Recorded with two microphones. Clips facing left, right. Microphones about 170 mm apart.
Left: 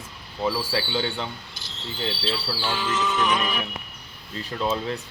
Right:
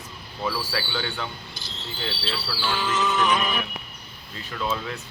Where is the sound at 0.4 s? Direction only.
25° left (ahead or behind).